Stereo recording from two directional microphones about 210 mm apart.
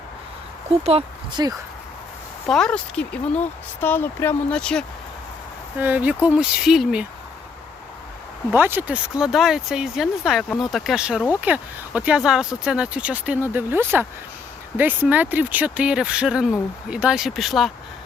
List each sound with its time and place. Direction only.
0.9 s speech: 25° right (ahead or behind)
2.5 s speech: 5° left (ahead or behind)
5.8 s speech: 10° right (ahead or behind)
8.5 s speech: 10° right (ahead or behind)